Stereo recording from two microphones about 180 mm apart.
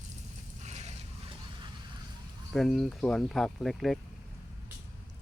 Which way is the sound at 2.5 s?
Centre (ahead or behind).